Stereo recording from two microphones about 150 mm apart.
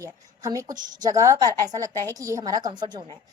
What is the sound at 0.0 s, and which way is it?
A woman's voice, 20° right (ahead or behind).